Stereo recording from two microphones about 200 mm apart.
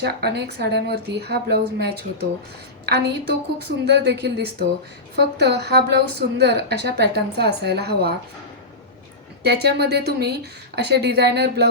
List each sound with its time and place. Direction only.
0.0 s a woman's voice: 55° right (ahead or behind)
9.4 s a woman's voice: 55° right (ahead or behind)